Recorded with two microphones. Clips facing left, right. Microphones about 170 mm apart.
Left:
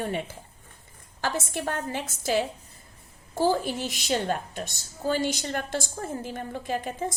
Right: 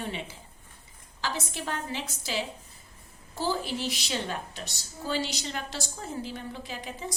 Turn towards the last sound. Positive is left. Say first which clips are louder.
# left 8 dB
turn(degrees=50)  # may be behind; listen again after turning